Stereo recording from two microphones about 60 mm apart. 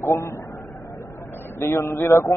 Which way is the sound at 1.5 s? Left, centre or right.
Left.